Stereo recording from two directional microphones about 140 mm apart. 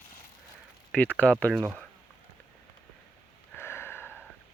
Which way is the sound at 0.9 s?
10° left (ahead or behind).